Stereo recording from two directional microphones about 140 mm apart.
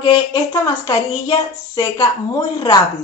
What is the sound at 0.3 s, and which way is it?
A woman's voice, 30° left (ahead or behind).